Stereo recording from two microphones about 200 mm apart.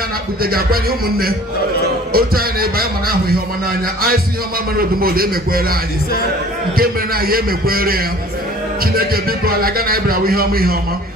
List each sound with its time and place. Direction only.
0.4 s a man's voice: 50° right (ahead or behind)
4.7 s a man's voice: 45° right (ahead or behind)
6.8 s a man's voice: 50° right (ahead or behind)